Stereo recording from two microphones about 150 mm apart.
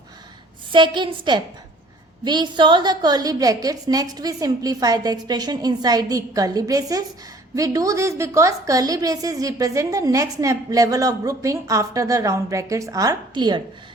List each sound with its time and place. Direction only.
0.7 s a woman's voice: 30° right (ahead or behind)